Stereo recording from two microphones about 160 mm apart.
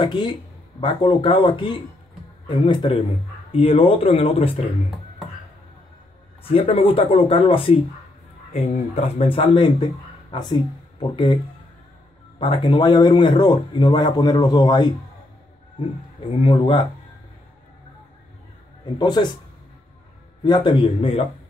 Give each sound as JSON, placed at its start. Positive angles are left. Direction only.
{"t": 0.0, "sound": "speech", "side_deg": 30}
{"t": 6.4, "sound": "speech", "side_deg": 35}
{"t": 12.4, "sound": "speech", "side_deg": 30}
{"t": 16.3, "sound": "speech", "side_deg": 30}
{"t": 18.9, "sound": "speech", "side_deg": 25}
{"t": 20.4, "sound": "speech", "side_deg": 30}